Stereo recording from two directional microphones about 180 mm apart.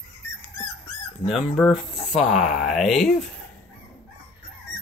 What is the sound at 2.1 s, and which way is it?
Speech, centre (ahead or behind).